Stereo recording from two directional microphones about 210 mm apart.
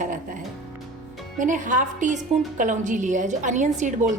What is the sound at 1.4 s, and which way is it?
A woman's voice, 40° right (ahead or behind).